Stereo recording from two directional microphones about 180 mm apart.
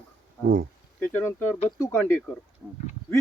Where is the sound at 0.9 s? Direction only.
10° left (ahead or behind).